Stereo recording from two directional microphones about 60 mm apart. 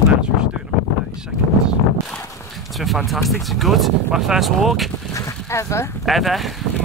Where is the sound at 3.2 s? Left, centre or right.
Centre.